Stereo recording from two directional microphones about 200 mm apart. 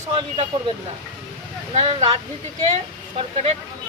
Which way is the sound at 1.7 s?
30° right (ahead or behind).